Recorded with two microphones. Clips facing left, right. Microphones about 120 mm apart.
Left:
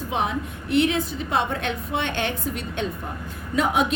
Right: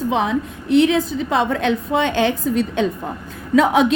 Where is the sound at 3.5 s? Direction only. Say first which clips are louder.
Right 8 dB; 90° right.